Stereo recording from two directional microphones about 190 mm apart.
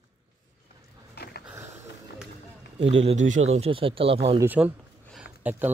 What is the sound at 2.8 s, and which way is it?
Speech, 35° right (ahead or behind).